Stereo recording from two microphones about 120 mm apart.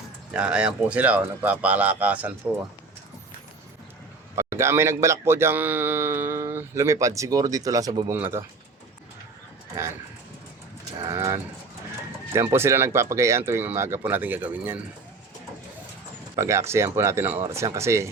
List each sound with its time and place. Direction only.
0.3 s speech: 10° right (ahead or behind)
4.4 s speech: 20° right (ahead or behind)
8.1 s speech: 20° right (ahead or behind)
11.1 s bird: 25° right (ahead or behind)
12.3 s speech: 20° right (ahead or behind)
16.3 s speech: 25° right (ahead or behind)